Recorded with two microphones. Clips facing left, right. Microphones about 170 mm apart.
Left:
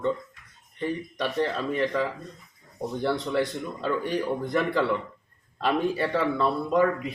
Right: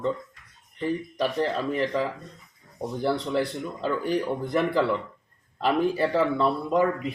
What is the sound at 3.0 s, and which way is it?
Speech, 5° right (ahead or behind).